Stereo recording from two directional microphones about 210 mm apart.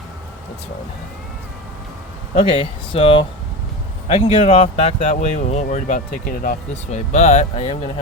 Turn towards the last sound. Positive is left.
turn(degrees=30)  # may be behind; listen again after turning